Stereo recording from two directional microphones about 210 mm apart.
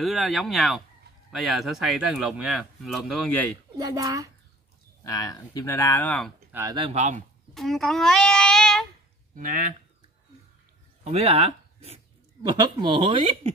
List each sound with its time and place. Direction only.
0.0 s speech: centre (ahead or behind)
3.7 s a child's voice: 15° right (ahead or behind)
5.0 s speech: 15° left (ahead or behind)
6.5 s speech: 15° right (ahead or behind); by 7.2 s 35° right (ahead or behind)
7.5 s a child's voice: centre (ahead or behind)
9.3 s speech: 40° right (ahead or behind)
11.1 s speech: 30° right (ahead or behind)